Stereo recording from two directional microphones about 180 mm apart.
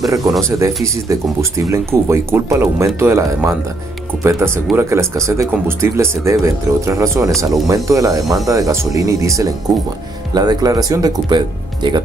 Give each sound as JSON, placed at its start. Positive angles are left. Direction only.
{"t": 0.0, "sound": "speech", "side_deg": -20}